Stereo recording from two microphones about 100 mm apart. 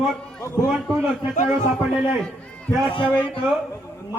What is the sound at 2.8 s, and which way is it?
Speech, 55° left (ahead or behind).